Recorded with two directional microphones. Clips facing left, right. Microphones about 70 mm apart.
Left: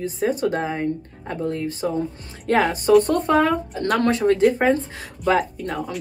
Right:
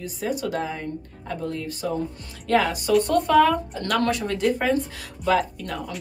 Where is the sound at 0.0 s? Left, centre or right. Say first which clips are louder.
Left 6 dB; left.